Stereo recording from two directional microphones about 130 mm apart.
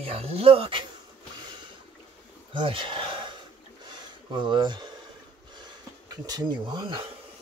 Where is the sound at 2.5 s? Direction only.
40° right (ahead or behind).